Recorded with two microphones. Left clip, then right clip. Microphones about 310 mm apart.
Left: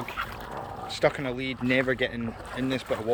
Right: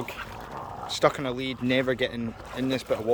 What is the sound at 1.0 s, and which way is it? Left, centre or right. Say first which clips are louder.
Speech: right 1 dB; centre.